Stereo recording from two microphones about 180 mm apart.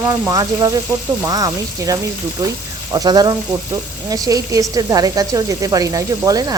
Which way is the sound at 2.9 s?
20° right (ahead or behind).